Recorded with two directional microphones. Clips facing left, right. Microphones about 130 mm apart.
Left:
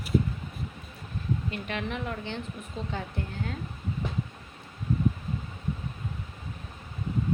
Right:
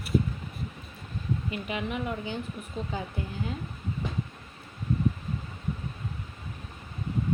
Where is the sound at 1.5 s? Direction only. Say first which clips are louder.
Right 1 dB; 5° right (ahead or behind).